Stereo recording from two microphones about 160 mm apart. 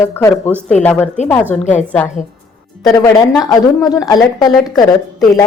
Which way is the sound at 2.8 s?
20° left (ahead or behind).